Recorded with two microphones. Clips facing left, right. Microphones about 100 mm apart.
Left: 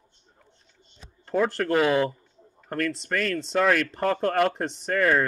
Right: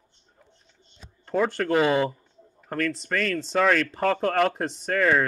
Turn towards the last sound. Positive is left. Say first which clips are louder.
# even
turn(degrees=0)  # may be behind; listen again after turning